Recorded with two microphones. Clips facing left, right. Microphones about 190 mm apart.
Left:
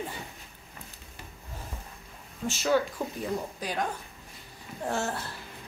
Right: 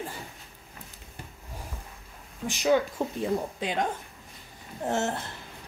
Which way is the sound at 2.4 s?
15° right (ahead or behind).